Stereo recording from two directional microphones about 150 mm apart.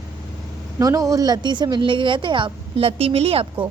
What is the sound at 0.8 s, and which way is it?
A woman's voice, 25° right (ahead or behind).